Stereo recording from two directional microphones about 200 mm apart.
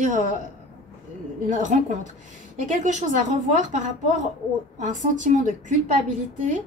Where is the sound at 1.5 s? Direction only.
40° right (ahead or behind).